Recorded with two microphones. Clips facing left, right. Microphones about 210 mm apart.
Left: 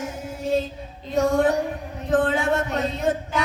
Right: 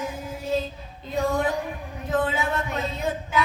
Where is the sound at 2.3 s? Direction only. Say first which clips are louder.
Left 5 dB; 80° left.